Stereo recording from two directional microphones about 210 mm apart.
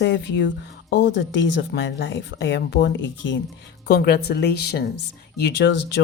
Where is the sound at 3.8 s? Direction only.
45° left (ahead or behind).